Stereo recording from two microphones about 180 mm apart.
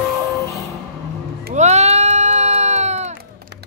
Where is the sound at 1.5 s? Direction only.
40° right (ahead or behind).